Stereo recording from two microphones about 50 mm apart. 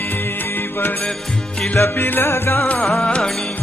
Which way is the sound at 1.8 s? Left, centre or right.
Left.